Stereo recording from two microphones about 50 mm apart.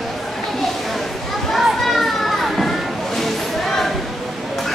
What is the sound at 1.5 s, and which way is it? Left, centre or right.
Children playing, centre.